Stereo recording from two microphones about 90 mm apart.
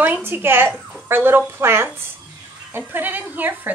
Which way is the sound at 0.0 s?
20° right (ahead or behind).